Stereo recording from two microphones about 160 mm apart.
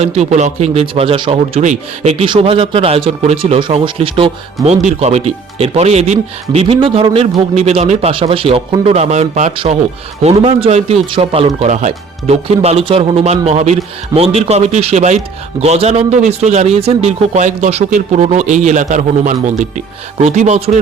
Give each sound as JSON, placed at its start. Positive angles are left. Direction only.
{"t": 0.0, "sound": "a man's voice", "side_deg": -40}
{"t": 11.6, "sound": "a man's voice", "side_deg": -45}